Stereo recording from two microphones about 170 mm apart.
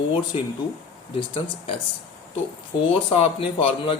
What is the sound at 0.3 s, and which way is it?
Speech, 35° left (ahead or behind).